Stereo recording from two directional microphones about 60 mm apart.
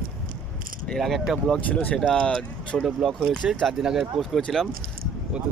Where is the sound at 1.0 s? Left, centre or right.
Centre.